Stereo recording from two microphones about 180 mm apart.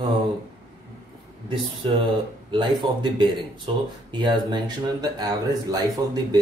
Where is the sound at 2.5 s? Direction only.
25° right (ahead or behind).